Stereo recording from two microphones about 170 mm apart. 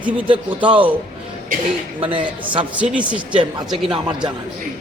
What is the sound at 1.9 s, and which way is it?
Speech, 30° right (ahead or behind).